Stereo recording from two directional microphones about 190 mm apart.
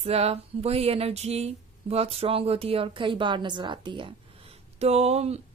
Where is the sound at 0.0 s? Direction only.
30° right (ahead or behind).